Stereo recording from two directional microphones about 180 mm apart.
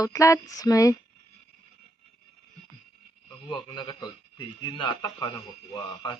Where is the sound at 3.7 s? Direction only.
25° left (ahead or behind).